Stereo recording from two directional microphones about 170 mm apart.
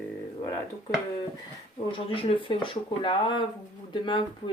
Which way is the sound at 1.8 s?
30° left (ahead or behind).